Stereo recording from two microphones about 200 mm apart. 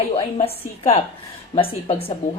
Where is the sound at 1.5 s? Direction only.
30° left (ahead or behind).